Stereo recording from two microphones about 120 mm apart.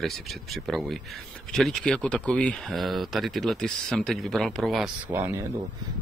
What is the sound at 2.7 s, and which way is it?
Speech, centre (ahead or behind).